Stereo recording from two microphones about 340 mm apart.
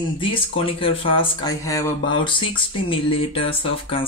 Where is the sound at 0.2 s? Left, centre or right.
Centre.